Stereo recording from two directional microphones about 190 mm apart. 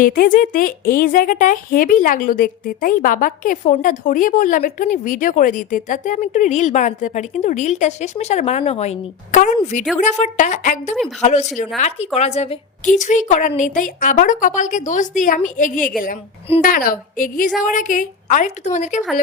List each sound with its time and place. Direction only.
0.0 s a woman's voice: 50° left (ahead or behind)